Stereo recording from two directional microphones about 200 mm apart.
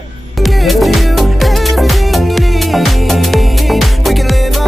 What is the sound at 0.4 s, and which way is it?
Music, centre (ahead or behind).